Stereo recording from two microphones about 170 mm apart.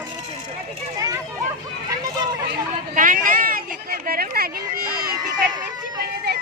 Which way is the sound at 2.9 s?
50° right (ahead or behind).